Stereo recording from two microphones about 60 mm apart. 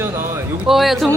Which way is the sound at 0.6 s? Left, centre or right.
Centre.